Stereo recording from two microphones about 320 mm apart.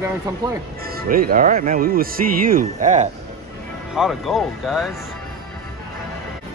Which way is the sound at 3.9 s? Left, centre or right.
Centre.